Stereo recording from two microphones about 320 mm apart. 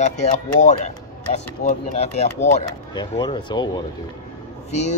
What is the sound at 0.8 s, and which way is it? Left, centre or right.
Speech, left.